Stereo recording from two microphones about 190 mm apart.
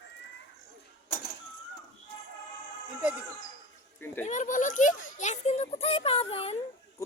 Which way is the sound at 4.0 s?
10° left (ahead or behind).